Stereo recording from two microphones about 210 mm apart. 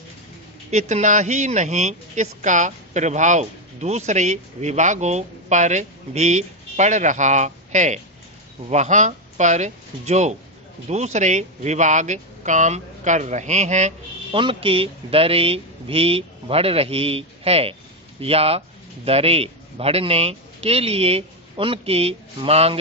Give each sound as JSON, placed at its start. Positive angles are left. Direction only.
{"t": 0.7, "sound": "a man's voice", "side_deg": -35}